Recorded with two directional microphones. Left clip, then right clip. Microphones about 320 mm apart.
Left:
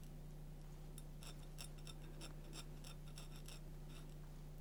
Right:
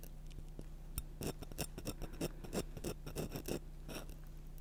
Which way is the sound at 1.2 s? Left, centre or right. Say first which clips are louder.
Right 14 dB; right.